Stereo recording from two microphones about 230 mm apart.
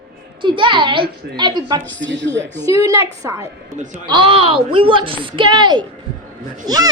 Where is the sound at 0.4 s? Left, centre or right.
Right.